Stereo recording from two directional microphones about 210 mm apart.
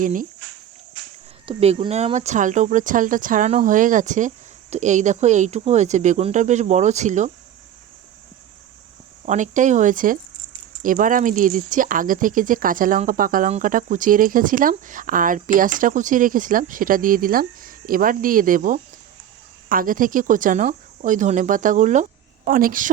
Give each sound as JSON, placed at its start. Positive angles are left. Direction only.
{"t": 0.0, "sound": "speech", "side_deg": -40}
{"t": 1.5, "sound": "speech", "side_deg": -30}
{"t": 9.2, "sound": "speech", "side_deg": -35}